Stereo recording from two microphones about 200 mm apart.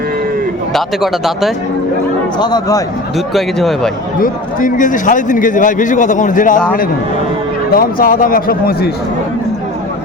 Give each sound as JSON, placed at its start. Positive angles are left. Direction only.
{"t": 0.7, "sound": "speech", "side_deg": 0}
{"t": 2.4, "sound": "speech", "side_deg": 20}
{"t": 3.3, "sound": "speech", "side_deg": 0}
{"t": 4.2, "sound": "a man's voice", "side_deg": 40}
{"t": 7.7, "sound": "speech", "side_deg": 45}